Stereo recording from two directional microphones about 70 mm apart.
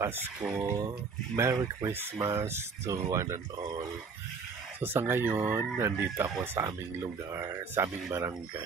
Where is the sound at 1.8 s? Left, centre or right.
Right.